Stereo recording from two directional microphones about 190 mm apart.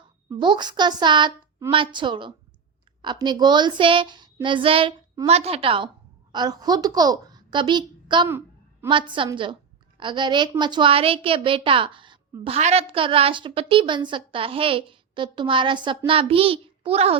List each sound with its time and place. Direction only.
0.3 s a woman's voice: 25° right (ahead or behind)
8.3 s a sound: 10° right (ahead or behind)
8.9 s a woman's voice: 25° right (ahead or behind)